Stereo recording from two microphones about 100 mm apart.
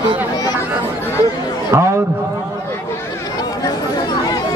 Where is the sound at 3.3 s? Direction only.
40° left (ahead or behind).